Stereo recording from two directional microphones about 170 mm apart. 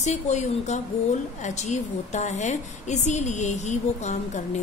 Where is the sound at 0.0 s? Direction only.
45° left (ahead or behind).